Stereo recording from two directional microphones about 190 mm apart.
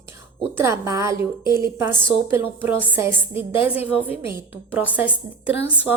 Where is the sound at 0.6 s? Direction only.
15° right (ahead or behind).